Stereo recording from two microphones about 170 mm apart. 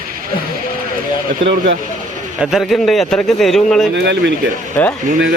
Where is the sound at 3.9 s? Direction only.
90° right.